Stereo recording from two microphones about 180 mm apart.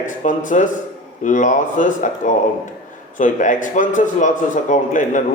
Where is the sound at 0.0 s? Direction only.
45° left (ahead or behind).